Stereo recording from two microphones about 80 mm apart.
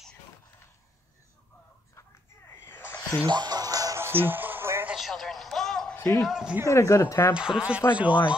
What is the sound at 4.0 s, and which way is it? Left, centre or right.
Music, right.